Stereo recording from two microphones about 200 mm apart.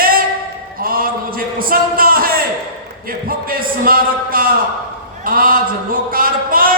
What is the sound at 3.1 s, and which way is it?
A man's voice, 45° right (ahead or behind).